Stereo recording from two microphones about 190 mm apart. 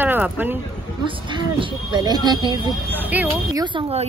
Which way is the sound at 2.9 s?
10° right (ahead or behind).